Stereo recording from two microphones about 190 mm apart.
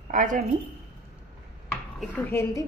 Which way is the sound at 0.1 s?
45° right (ahead or behind).